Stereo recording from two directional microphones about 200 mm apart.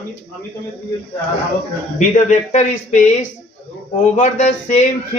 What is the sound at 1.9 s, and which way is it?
A man's voice, 35° left (ahead or behind).